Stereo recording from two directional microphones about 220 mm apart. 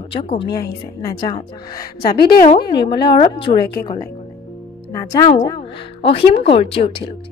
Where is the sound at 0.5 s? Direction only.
15° left (ahead or behind).